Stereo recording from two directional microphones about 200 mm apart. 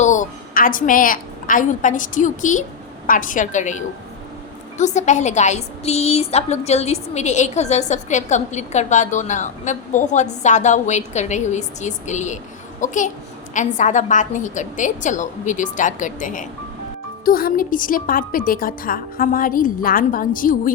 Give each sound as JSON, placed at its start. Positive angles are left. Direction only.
{"t": 0.0, "sound": "a woman's voice", "side_deg": 40}